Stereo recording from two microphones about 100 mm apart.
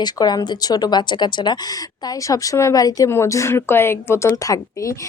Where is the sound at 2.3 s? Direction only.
30° left (ahead or behind).